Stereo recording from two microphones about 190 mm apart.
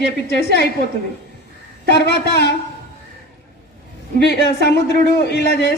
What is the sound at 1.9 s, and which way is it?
Speech, 60° left (ahead or behind).